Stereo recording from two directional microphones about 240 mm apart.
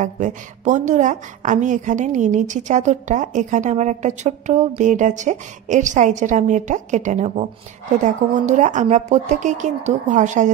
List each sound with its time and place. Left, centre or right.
0.0 s a woman's voice: right